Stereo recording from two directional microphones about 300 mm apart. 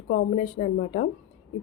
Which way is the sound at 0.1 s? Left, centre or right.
Left.